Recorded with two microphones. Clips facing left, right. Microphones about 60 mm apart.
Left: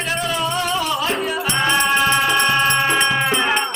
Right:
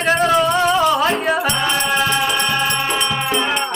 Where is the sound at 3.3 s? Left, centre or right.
Centre.